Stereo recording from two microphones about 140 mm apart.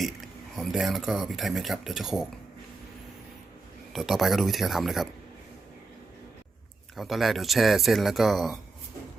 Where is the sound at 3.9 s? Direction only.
Centre (ahead or behind).